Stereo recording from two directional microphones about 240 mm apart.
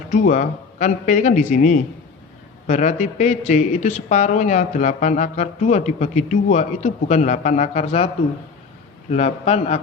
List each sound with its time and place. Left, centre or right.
0.1 s a man's voice: left